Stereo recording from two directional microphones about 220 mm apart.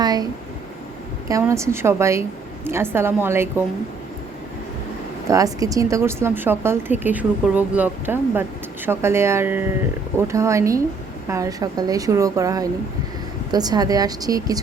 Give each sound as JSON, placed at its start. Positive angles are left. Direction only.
{"t": 0.0, "sound": "speech", "side_deg": -15}
{"t": 1.3, "sound": "speech", "side_deg": -15}
{"t": 5.3, "sound": "speech", "side_deg": -15}